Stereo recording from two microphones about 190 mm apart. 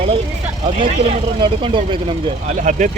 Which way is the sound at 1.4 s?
25° right (ahead or behind).